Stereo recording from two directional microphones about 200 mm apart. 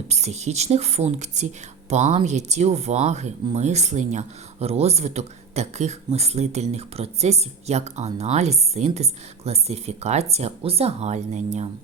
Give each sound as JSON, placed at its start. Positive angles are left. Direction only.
{"t": 0.1, "sound": "speech", "side_deg": -35}